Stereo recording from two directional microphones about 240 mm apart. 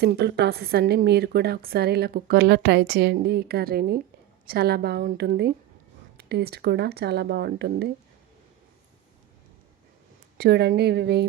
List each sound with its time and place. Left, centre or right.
0.0 s a woman's voice: right
10.3 s speech: right